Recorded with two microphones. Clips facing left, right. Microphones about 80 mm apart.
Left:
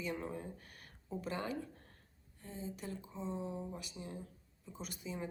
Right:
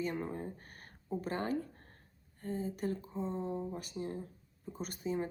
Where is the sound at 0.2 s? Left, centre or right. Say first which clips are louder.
Right 4 dB; right.